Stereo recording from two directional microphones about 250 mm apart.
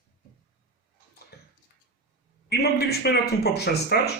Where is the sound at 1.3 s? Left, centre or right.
Left.